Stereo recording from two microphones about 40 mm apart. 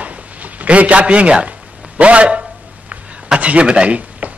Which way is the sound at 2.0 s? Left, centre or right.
Right.